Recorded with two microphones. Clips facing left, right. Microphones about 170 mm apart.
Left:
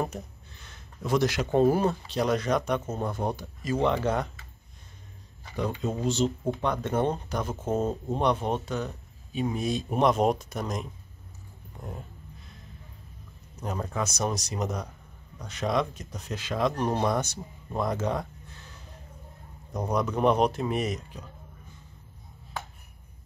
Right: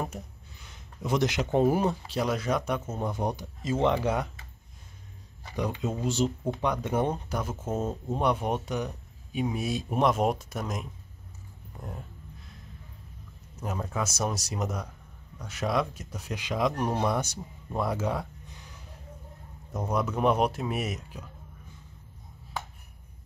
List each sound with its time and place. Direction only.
0.0 s speech: 10° right (ahead or behind)
2.2 s speech: 5° right (ahead or behind)
3.0 s speech: 15° right (ahead or behind)
5.9 s speech: 10° right (ahead or behind)
13.7 s speech: 5° right (ahead or behind)
19.9 s speech: 5° right (ahead or behind)